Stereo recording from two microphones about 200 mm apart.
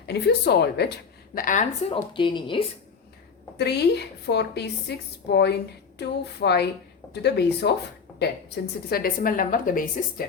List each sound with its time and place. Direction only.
0.1 s a woman's voice: 55° left (ahead or behind)
1.4 s a woman's voice: 40° left (ahead or behind)
1.9 s speech: 25° left (ahead or behind)
3.6 s a woman's voice: 55° left (ahead or behind)